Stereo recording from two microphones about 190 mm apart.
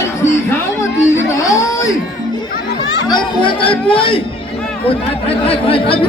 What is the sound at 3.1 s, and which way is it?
Speech, 25° left (ahead or behind).